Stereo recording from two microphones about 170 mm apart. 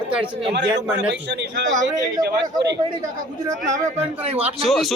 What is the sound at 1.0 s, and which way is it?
Speech, 90° right.